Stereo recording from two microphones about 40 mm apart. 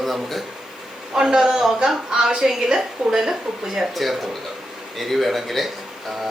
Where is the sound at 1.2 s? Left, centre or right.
Centre.